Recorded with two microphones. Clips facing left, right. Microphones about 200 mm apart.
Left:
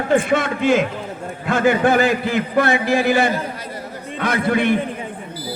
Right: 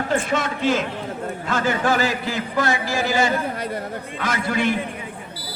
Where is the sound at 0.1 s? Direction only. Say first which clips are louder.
Left 8 dB; 55° left (ahead or behind).